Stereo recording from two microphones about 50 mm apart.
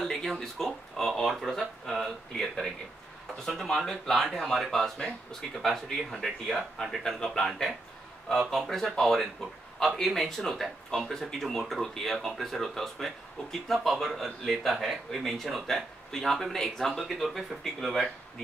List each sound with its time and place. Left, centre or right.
0.0 s speech: centre
6.8 s speech: centre
7.4 s speech: centre